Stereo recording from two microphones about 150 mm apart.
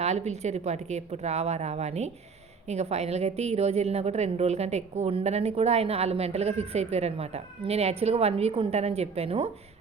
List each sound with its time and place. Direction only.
0.0 s a woman's voice: 50° right (ahead or behind)